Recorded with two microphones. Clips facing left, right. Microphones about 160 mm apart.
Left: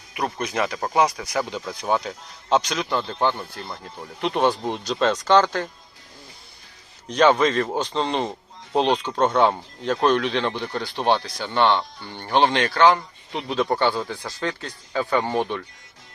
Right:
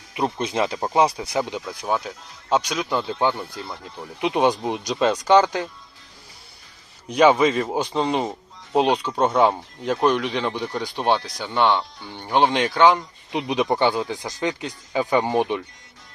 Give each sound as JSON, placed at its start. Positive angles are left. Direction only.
{"t": 0.1, "sound": "speech", "side_deg": -25}
{"t": 1.6, "sound": "speech", "side_deg": -5}
{"t": 7.1, "sound": "speech", "side_deg": -10}